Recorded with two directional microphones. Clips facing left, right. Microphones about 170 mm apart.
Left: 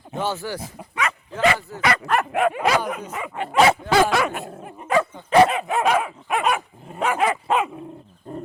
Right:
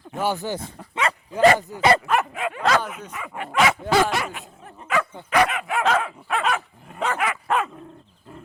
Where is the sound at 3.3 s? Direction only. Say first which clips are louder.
Left 4 dB; 30° left (ahead or behind).